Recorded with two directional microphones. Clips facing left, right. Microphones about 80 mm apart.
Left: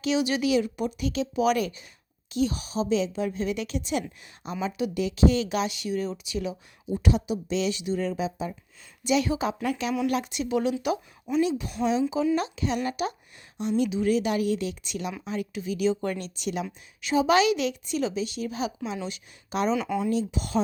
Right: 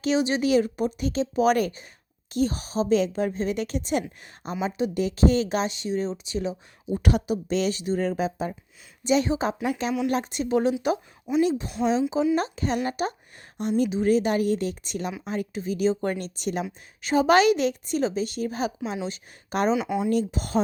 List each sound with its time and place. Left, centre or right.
0.0 s speech: right
6.9 s a woman's voice: right
9.0 s a woman's voice: right
19.7 s speech: centre
20.1 s a woman's voice: right